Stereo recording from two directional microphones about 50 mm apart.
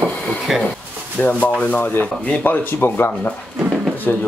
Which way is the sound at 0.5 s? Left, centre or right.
Centre.